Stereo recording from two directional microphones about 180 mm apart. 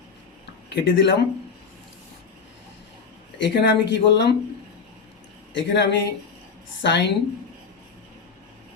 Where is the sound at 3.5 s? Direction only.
70° left (ahead or behind).